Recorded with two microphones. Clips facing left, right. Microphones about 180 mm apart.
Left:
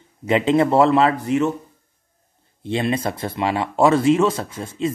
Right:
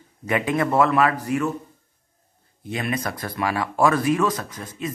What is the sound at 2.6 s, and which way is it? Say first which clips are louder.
Speech: left 5 dB; 30° left (ahead or behind).